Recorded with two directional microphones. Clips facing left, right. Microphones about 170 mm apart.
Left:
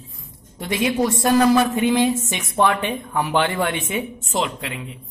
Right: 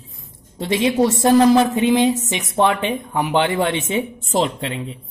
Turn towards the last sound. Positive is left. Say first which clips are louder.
# right 4 dB
turn(degrees=-30)  # may be behind; listen again after turning